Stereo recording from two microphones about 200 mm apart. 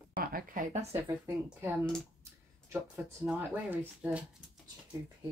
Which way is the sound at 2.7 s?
10° right (ahead or behind).